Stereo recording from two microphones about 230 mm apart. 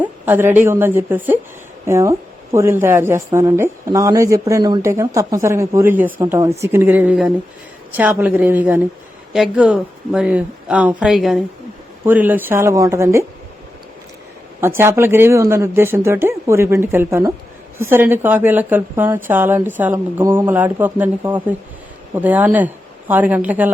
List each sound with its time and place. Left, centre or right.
0.0 s a woman's voice: centre
14.6 s a woman's voice: centre